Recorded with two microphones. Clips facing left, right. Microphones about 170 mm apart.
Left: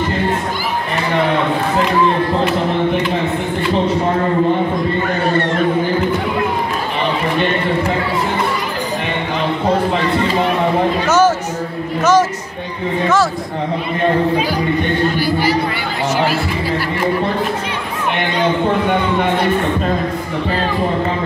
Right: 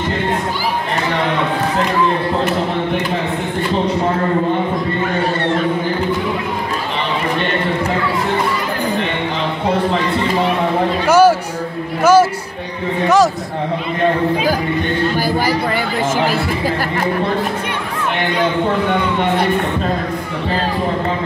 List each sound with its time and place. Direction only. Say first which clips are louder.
11.1 s a sound: right 4 dB; 10° right (ahead or behind)
12.0 s music: right 2 dB; 10° right (ahead or behind)
15.1 s speech: even; 45° right (ahead or behind)